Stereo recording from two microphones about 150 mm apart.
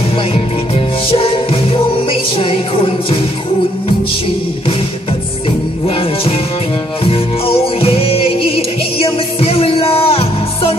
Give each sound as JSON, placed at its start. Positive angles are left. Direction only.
{"t": 1.1, "sound": "music", "side_deg": 40}
{"t": 7.1, "sound": "music", "side_deg": 40}